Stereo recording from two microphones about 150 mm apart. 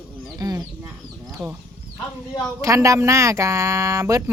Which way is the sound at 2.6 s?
20° right (ahead or behind).